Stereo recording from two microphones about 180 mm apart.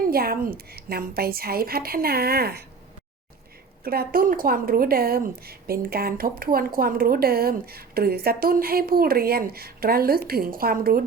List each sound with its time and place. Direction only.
0.1 s speech: 55° right (ahead or behind)
3.8 s speech: 55° right (ahead or behind)